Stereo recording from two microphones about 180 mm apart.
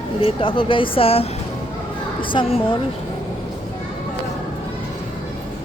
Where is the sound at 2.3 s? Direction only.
30° left (ahead or behind).